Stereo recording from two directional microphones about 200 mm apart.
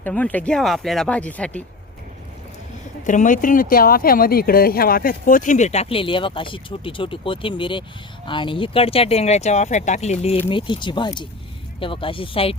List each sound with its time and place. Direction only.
0.0 s speech: 10° left (ahead or behind)
3.0 s speech: 40° left (ahead or behind)